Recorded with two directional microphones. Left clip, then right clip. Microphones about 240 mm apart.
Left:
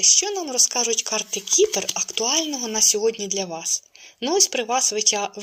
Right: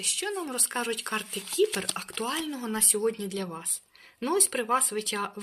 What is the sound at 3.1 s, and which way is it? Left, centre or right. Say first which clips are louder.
Speech: left 8 dB; centre.